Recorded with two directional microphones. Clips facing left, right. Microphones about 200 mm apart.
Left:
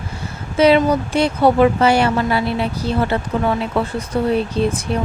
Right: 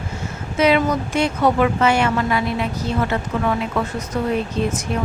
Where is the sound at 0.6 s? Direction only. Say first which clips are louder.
Left 4 dB; 30° left (ahead or behind).